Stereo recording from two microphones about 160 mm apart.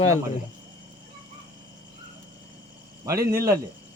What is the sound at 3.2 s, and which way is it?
Speech, 70° right (ahead or behind).